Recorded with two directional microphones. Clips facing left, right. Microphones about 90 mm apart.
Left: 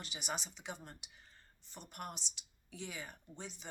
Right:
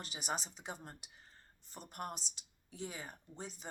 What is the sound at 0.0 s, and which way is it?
Speech, 40° right (ahead or behind).